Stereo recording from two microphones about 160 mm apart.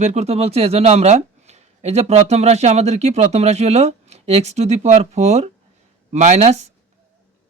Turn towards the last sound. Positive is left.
turn(degrees=-45)  # may be behind; listen again after turning